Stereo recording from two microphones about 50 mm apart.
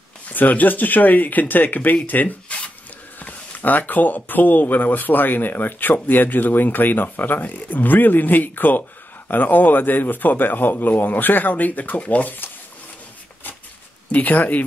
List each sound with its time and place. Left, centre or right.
0.3 s speech: left
14.1 s speech: left